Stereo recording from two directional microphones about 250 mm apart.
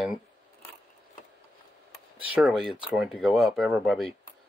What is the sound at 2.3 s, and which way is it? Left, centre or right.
Speech, centre.